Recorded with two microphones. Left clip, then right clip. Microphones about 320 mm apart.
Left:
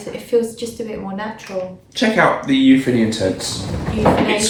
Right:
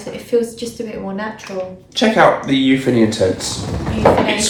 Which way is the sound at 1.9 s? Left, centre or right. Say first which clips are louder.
Right 3 dB; centre.